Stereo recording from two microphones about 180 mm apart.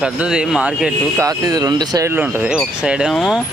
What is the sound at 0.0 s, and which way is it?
Speech, 5° right (ahead or behind).